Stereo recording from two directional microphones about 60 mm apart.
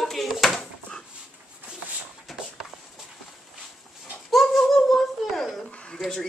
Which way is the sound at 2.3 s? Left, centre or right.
Centre.